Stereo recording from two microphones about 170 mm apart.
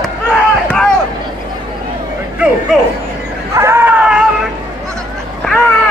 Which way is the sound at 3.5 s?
15° right (ahead or behind).